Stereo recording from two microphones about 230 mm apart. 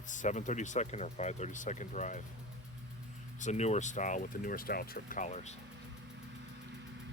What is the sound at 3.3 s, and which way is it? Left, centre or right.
Speech, left.